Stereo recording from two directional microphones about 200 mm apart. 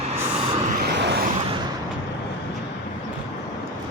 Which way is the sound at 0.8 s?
55° right (ahead or behind).